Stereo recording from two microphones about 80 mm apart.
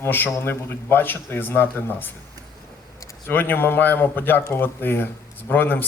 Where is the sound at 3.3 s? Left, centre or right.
Left.